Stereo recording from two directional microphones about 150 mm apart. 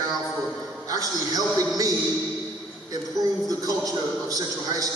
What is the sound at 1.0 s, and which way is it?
Speech, 25° right (ahead or behind).